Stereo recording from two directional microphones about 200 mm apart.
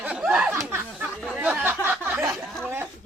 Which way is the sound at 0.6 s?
10° right (ahead or behind).